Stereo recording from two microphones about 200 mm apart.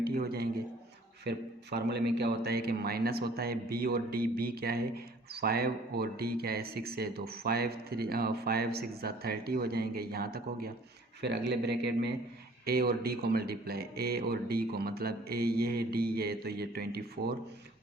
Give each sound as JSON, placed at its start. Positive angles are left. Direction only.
{"t": 0.0, "sound": "a man's voice", "side_deg": -50}